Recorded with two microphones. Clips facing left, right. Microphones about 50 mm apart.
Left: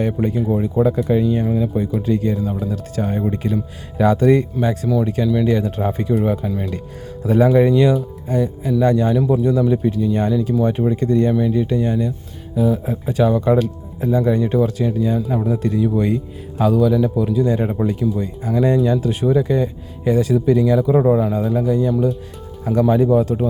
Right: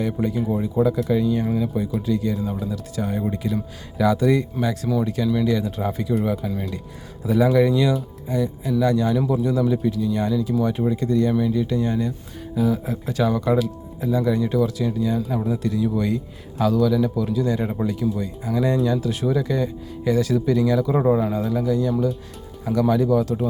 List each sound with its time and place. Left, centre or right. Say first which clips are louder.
0.0 s speech: left 4 dB; left
0.5 s speech: left 3 dB; left
1.5 s speech: left 3 dB; centre
2.0 s speech: left 4 dB; left
5.5 s speech: left 4 dB; left
7.5 s speech: left 5 dB; left
8.3 s speech: left 4 dB; left
9.4 s speech: left 4 dB; left
10.1 s speech: left 4 dB; left
11.3 s speech: left 3 dB; centre
11.5 s speech: left 3 dB; left
13.6 s speech: left 4 dB; left
20.9 s speech: left 4 dB; centre
21.5 s speech: left 4 dB; left